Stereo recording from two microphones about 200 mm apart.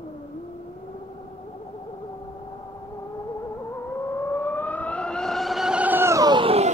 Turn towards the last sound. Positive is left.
turn(degrees=-30)  # may be behind; listen again after turning